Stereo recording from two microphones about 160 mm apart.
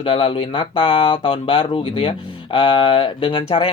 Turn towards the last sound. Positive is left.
turn(degrees=30)  # may be behind; listen again after turning